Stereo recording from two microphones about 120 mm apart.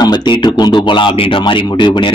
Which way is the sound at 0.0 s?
40° left (ahead or behind).